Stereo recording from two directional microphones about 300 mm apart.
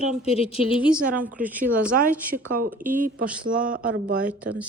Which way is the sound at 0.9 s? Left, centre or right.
Centre.